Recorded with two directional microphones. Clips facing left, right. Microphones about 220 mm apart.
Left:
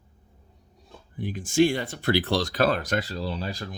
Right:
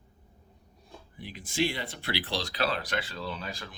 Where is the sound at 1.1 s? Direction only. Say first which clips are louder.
Left 10 dB; 50° left (ahead or behind).